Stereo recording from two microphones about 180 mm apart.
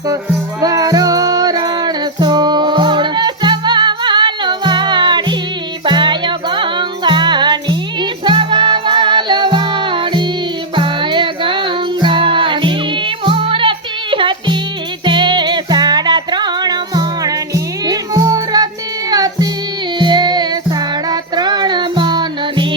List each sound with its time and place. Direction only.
0.6 s music: 20° right (ahead or behind)